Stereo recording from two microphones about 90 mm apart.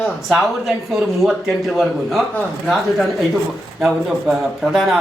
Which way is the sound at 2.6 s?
Centre (ahead or behind).